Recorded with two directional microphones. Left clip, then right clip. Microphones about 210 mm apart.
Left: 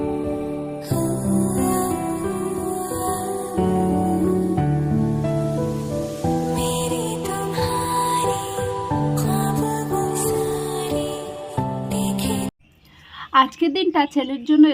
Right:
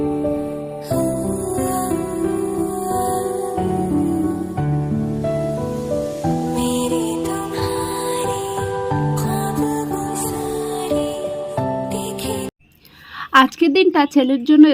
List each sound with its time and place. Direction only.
1.5 s music: centre (ahead or behind)
2.9 s music: centre (ahead or behind)
6.6 s music: centre (ahead or behind)
9.3 s music: centre (ahead or behind)
13.3 s a woman's voice: 25° right (ahead or behind)